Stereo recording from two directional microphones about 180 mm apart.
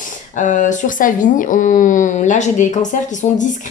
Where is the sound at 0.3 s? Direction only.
45° left (ahead or behind).